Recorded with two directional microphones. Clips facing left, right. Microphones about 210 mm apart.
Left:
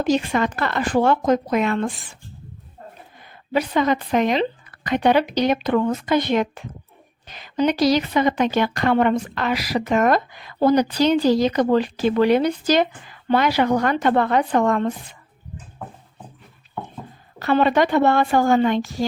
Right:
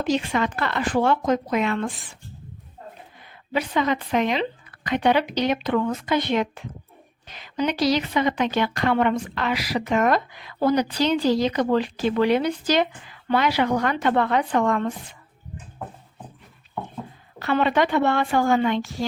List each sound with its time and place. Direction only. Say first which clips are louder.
0.0 s a woman's voice: left 3 dB; 45° left (ahead or behind)
3.5 s a woman's voice: left 3 dB; 40° left (ahead or behind)
17.4 s speech: left 3 dB; 40° left (ahead or behind)